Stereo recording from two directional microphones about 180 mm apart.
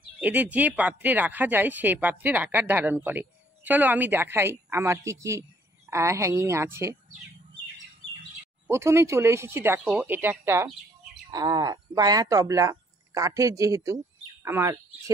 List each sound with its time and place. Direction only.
0.2 s speech: 10° right (ahead or behind)
8.6 s speech: 15° right (ahead or behind)